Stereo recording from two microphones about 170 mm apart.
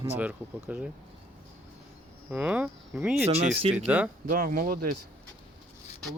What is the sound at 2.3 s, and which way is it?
Speech, 10° right (ahead or behind).